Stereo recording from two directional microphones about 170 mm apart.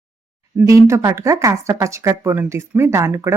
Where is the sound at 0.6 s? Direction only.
15° right (ahead or behind).